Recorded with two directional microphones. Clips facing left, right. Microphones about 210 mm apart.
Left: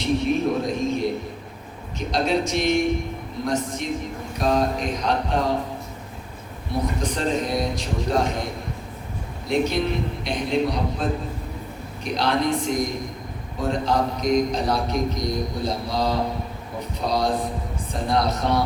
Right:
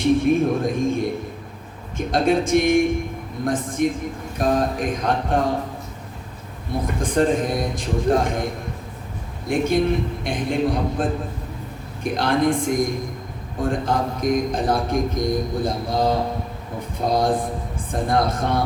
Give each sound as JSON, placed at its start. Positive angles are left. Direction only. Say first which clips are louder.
{"t": 0.0, "sound": "a sound", "louder": "right 4 dB", "side_deg": -50}
{"t": 2.0, "sound": "a man's voice", "louder": "right 3 dB", "side_deg": -50}
{"t": 6.8, "sound": "a man's voice", "louder": "right 7 dB", "side_deg": -50}
{"t": 9.5, "sound": "a man's voice", "louder": "right 3 dB", "side_deg": -50}